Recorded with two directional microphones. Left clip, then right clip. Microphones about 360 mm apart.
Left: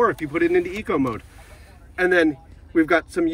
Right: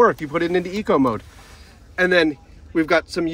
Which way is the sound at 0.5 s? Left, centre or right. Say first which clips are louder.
Left 1 dB; right.